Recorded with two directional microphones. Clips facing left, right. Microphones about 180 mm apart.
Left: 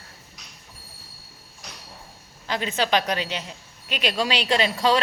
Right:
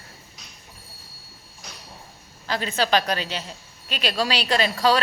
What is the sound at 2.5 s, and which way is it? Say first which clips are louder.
A woman's voice: right 1 dB; 20° left (ahead or behind).